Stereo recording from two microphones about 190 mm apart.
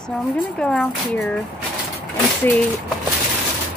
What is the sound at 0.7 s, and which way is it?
Speech, 5° left (ahead or behind).